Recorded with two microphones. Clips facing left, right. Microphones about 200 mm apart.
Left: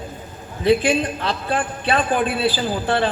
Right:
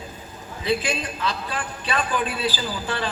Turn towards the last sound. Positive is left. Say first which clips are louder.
# left 7 dB
turn(degrees=55)  # may be behind; listen again after turning